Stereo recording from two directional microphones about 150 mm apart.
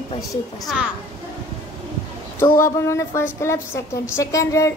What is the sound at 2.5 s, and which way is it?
A woman's voice, 20° left (ahead or behind).